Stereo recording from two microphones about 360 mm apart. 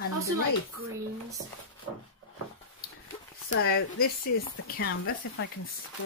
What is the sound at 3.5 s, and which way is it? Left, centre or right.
Speech, left.